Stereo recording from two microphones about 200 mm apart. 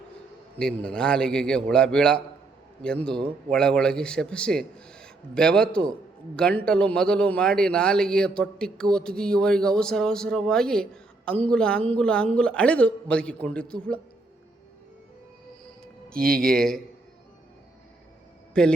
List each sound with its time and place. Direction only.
0.6 s a man's voice: 5° left (ahead or behind)
16.1 s speech: 45° right (ahead or behind)
18.6 s a man's voice: 5° left (ahead or behind)